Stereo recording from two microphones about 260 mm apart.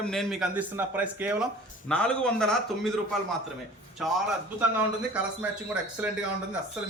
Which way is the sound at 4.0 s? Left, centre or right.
Centre.